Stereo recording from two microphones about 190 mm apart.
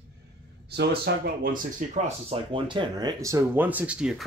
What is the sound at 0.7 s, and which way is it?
Speech, 60° right (ahead or behind).